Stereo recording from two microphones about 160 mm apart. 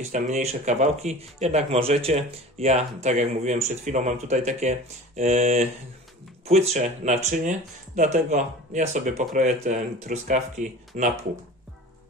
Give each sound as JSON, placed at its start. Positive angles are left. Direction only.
{"t": 0.0, "sound": "speech", "side_deg": -45}